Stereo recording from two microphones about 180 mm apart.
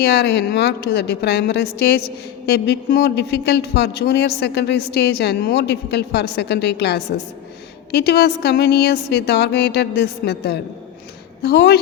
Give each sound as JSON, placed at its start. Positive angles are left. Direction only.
{"t": 0.0, "sound": "speech", "side_deg": 65}